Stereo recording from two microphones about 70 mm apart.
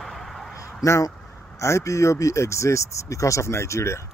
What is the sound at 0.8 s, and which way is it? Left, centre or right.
Speech, left.